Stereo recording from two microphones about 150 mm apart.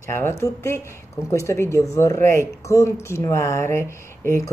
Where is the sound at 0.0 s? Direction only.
15° left (ahead or behind).